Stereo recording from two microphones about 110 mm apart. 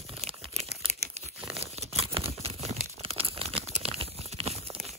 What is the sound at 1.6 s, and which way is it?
Tearing, 75° right (ahead or behind).